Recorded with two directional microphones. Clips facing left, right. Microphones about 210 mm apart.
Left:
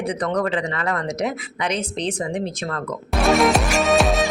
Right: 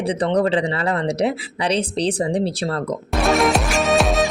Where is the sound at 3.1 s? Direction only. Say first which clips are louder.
Left 1 dB; centre (ahead or behind).